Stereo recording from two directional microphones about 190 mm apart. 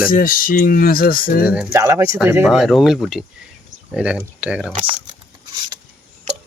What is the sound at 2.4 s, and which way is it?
Speech, centre (ahead or behind).